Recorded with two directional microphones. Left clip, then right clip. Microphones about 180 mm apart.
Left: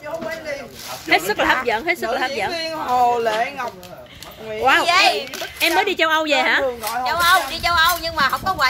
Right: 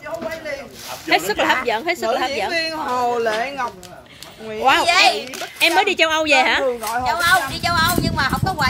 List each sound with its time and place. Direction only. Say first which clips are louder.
1.0 s speech: even; 5° right (ahead or behind)
2.5 s speech: even; 40° right (ahead or behind)
4.6 s a woman's voice: right 1 dB; 5° right (ahead or behind)
7.1 s speech: left 1 dB; centre (ahead or behind)